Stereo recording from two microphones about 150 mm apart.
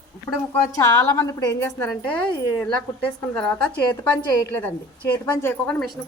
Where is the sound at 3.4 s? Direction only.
5° left (ahead or behind).